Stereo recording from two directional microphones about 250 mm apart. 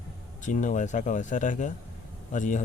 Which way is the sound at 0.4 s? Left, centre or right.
Left.